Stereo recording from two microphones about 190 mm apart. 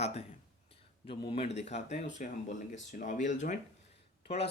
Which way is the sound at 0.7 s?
30° left (ahead or behind).